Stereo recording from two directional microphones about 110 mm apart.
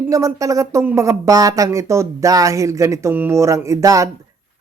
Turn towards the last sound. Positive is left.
turn(degrees=-30)  # may be behind; listen again after turning